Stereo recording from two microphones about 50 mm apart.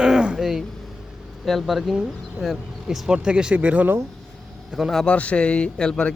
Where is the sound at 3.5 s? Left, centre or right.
Right.